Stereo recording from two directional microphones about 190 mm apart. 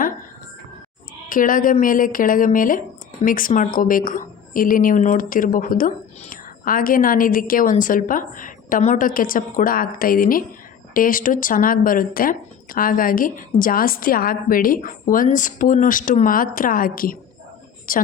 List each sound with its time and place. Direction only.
1.3 s speech: 45° left (ahead or behind)